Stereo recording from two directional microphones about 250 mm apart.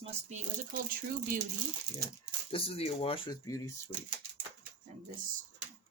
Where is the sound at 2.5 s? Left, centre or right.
Left.